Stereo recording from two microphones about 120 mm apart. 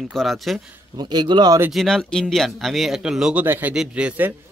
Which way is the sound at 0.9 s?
35° right (ahead or behind).